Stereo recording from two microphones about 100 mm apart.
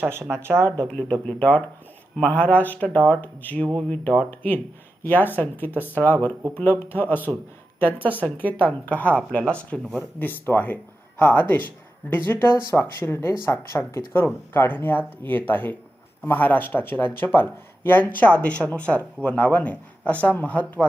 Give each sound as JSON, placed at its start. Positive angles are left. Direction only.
{"t": 0.0, "sound": "speech", "side_deg": -25}
{"t": 0.9, "sound": "speech", "side_deg": 10}
{"t": 10.2, "sound": "speech", "side_deg": 20}